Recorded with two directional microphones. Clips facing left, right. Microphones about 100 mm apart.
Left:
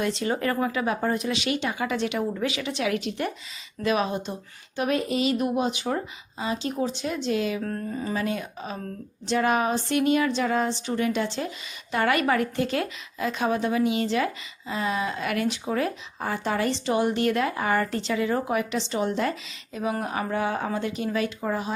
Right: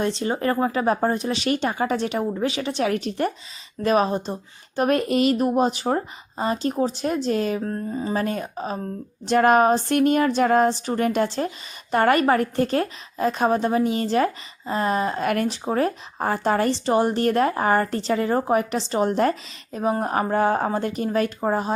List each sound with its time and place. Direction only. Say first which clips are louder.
0.0 s a woman's voice: right 3 dB; 30° right (ahead or behind)
4.8 s a sound: right 5 dB; 50° right (ahead or behind)
7.6 s speech: right 3 dB; 25° right (ahead or behind)
8.1 s a woman's voice: right 3 dB; 45° right (ahead or behind)
9.3 s a sound: right 7 dB; 50° right (ahead or behind)
15.6 s a woman's voice: right 4 dB; 40° right (ahead or behind)